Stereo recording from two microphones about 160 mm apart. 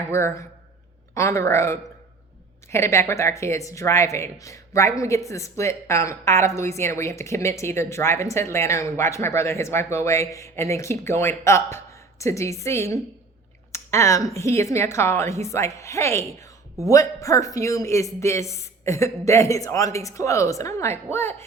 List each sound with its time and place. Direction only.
0.1 s a man's voice: 15° left (ahead or behind)